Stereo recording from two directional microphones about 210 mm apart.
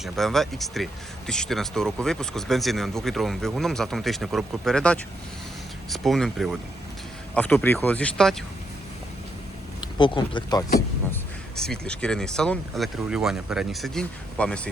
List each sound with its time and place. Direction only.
0.0 s speech: centre (ahead or behind)
9.8 s speech: 20° left (ahead or behind)
11.5 s speech: 5° left (ahead or behind)